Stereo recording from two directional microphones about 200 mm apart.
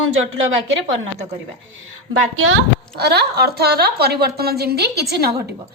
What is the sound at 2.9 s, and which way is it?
A woman's voice, 55° right (ahead or behind).